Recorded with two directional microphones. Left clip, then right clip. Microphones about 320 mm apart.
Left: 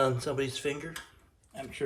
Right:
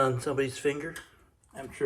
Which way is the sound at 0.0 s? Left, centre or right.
Centre.